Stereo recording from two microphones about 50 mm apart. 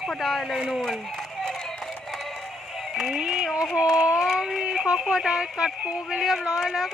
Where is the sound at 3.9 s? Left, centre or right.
Right.